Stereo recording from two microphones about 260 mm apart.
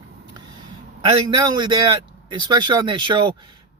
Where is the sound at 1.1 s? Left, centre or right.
Centre.